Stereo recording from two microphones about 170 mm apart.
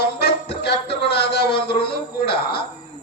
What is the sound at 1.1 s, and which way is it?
A man's voice, 70° left (ahead or behind).